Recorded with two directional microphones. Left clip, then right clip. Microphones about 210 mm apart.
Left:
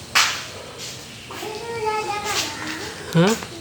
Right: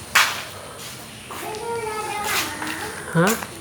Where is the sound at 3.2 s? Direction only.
40° left (ahead or behind).